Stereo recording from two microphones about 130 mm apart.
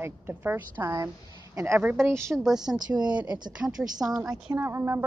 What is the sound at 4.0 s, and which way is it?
A woman's voice, 30° right (ahead or behind).